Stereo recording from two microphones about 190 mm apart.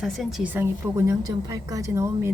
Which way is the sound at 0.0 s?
Centre (ahead or behind).